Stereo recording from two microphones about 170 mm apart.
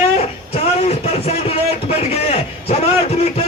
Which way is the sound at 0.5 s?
35° left (ahead or behind).